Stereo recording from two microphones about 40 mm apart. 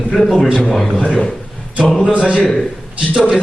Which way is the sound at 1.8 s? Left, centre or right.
Centre.